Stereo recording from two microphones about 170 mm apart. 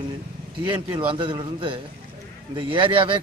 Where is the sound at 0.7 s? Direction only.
30° right (ahead or behind).